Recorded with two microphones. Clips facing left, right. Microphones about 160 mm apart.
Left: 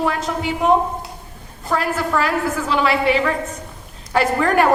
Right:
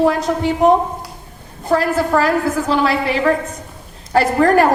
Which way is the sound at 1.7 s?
40° right (ahead or behind).